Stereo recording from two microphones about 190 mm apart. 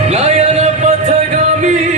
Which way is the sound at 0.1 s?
35° right (ahead or behind).